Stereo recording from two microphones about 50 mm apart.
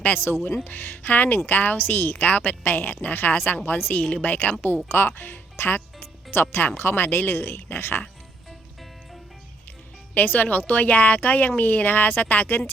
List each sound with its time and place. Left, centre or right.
0.6 s speech: left
4.9 s speech: left
10.2 s speech: left